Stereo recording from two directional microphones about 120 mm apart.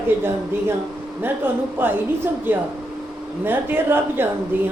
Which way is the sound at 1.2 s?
15° right (ahead or behind).